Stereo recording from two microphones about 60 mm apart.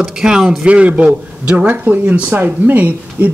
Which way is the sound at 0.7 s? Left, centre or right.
Right.